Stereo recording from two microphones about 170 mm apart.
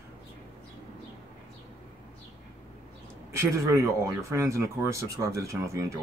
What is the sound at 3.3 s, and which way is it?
Speech, 20° right (ahead or behind).